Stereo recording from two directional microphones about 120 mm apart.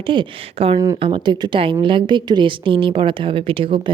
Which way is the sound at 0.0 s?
45° right (ahead or behind).